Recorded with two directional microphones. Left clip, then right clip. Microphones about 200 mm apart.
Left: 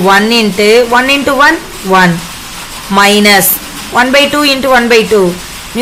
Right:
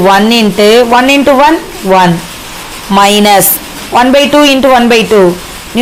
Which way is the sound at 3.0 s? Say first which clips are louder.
Right 1 dB; 25° right (ahead or behind).